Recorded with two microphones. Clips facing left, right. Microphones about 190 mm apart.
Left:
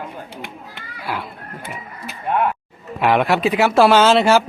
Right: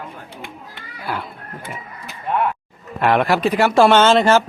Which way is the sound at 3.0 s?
Centre (ahead or behind).